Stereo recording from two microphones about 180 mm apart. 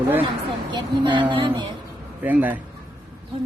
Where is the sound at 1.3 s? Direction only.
30° right (ahead or behind).